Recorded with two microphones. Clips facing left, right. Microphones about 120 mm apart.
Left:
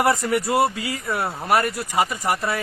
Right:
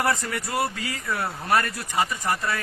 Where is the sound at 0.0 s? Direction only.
25° left (ahead or behind).